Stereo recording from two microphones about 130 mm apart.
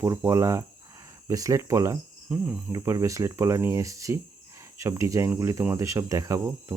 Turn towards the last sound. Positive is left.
turn(degrees=-25)  # may be behind; listen again after turning